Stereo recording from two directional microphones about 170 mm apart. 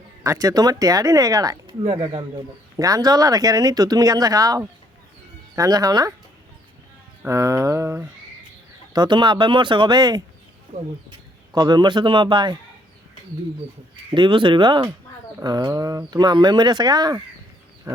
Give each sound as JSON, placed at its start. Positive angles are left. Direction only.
{"t": 0.2, "sound": "speech", "side_deg": -20}
{"t": 1.8, "sound": "speech", "side_deg": -35}
{"t": 2.7, "sound": "speech", "side_deg": -20}
{"t": 7.2, "sound": "a sound", "side_deg": -15}
{"t": 8.9, "sound": "speech", "side_deg": -25}
{"t": 11.5, "sound": "speech", "side_deg": -25}
{"t": 14.1, "sound": "speech", "side_deg": -30}
{"t": 17.9, "sound": "wild animals", "side_deg": -20}